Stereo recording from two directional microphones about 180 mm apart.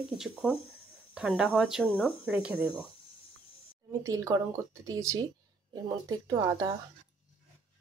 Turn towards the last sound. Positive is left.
turn(degrees=-20)  # may be behind; listen again after turning